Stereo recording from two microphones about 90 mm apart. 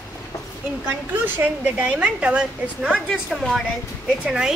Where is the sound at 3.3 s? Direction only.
Centre (ahead or behind).